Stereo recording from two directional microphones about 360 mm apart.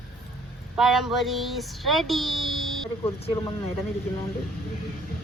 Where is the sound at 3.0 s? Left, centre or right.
Centre.